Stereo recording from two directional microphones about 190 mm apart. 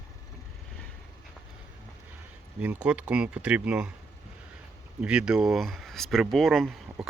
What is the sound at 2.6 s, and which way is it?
Speech, 5° right (ahead or behind).